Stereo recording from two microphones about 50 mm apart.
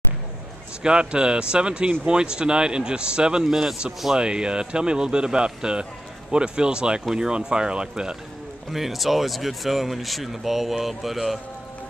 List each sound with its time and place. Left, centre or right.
0.8 s speech: centre
8.7 s speech: centre